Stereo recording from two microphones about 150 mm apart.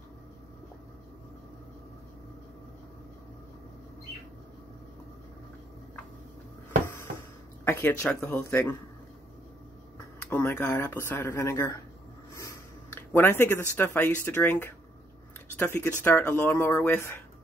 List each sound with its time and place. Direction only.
7.6 s speech: 15° left (ahead or behind)
10.3 s speech: 15° left (ahead or behind)